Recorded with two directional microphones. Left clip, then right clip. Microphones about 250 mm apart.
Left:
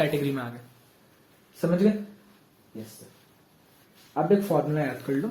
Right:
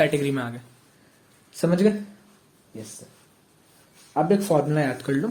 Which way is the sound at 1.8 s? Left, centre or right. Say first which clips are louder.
Right 4 dB; right.